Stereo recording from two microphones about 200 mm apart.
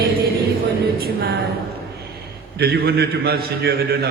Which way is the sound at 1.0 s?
55° right (ahead or behind).